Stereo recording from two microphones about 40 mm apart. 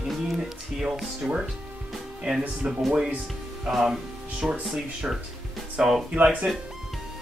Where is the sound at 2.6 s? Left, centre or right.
Centre.